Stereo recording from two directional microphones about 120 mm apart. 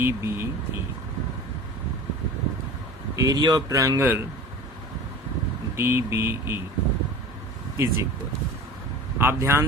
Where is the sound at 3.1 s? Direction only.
30° right (ahead or behind).